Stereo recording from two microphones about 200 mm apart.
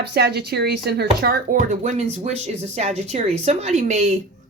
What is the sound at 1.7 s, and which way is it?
Speech, 35° right (ahead or behind).